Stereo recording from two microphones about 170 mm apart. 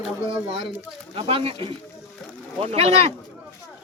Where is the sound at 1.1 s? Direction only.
35° right (ahead or behind).